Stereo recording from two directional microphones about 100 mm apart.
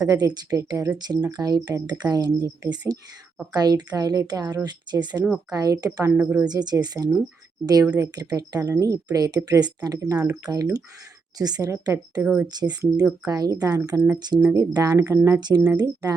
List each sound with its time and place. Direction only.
0.0 s speech: 40° right (ahead or behind)
6.1 s speech: 20° right (ahead or behind)
6.5 s speech: 40° right (ahead or behind)
12.2 s speech: 15° right (ahead or behind)
12.5 s speech: 40° right (ahead or behind)
15.4 s speech: 45° right (ahead or behind)